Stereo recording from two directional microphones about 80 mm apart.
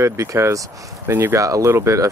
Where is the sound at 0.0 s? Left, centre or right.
Right.